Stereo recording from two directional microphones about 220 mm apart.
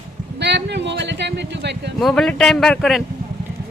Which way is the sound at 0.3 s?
50° right (ahead or behind).